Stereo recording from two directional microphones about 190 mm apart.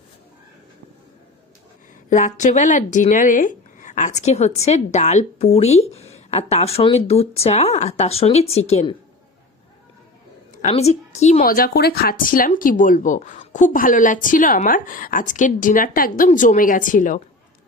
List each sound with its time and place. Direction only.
2.0 s speech: 40° left (ahead or behind)
10.5 s a woman's voice: 40° left (ahead or behind)